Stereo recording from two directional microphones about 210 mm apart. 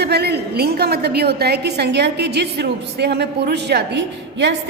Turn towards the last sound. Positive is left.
turn(degrees=-55)  # may be behind; listen again after turning